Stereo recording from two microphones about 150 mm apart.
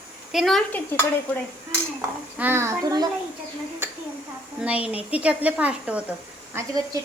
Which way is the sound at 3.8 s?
15° right (ahead or behind).